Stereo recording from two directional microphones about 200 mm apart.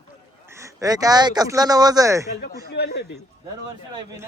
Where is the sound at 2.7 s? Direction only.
55° left (ahead or behind).